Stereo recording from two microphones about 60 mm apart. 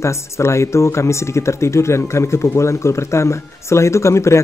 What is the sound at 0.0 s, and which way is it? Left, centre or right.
Speech, left.